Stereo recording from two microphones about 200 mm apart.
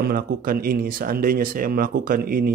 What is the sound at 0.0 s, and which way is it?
Speech, 50° right (ahead or behind).